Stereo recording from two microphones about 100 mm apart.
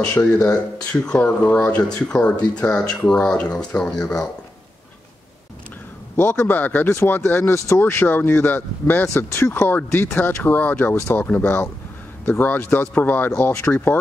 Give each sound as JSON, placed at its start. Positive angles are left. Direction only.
{"t": 0.0, "sound": "speech", "side_deg": 10}
{"t": 6.1, "sound": "speech", "side_deg": 20}
{"t": 13.3, "sound": "speech", "side_deg": 30}